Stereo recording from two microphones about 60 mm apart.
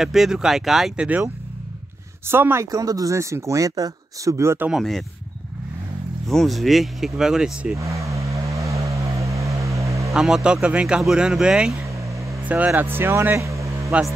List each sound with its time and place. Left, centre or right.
0.0 s speech: centre
0.9 s speech: right
2.2 s speech: right
2.6 s speech: right
6.2 s speech: centre
7.7 s vehicle: right
10.1 s speech: centre
11.7 s vehicle: right
12.4 s speech: right
13.4 s vehicle: right